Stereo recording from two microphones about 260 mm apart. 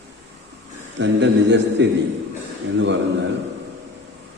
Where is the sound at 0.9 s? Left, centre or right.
Right.